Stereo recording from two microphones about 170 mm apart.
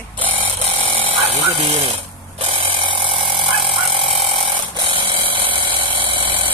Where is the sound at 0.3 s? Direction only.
35° right (ahead or behind).